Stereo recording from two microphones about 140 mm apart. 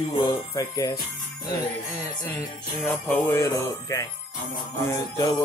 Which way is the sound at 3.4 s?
25° left (ahead or behind).